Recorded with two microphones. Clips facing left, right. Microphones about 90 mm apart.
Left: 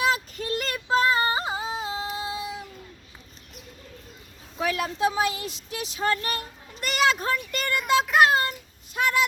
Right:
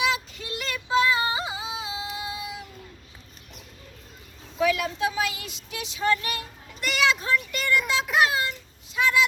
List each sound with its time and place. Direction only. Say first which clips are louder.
0.0 s yodeling: left 2 dB; 40° left (ahead or behind)
2.2 s cat: left 2 dB; 30° left (ahead or behind)
4.6 s child singing: right 1 dB; 30° left (ahead or behind); by 9.2 s 50° left (ahead or behind)